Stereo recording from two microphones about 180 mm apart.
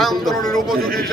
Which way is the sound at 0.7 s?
55° right (ahead or behind).